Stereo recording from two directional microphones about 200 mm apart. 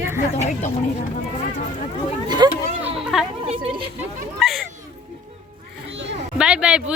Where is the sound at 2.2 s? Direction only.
20° right (ahead or behind).